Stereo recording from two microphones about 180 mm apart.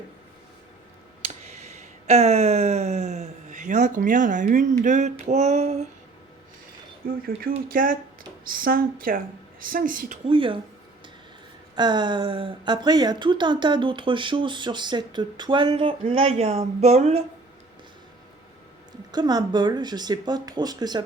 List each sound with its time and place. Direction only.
1.2 s a sound: 35° right (ahead or behind)
7.0 s a woman's voice: 55° right (ahead or behind)
10.2 s a woman's voice: 30° right (ahead or behind)
11.7 s a woman's voice: 25° right (ahead or behind)
19.1 s a woman's voice: 20° right (ahead or behind)